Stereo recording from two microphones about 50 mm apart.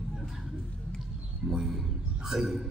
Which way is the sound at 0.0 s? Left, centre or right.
Centre.